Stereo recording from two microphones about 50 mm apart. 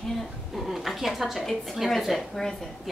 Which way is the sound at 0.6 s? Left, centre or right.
Centre.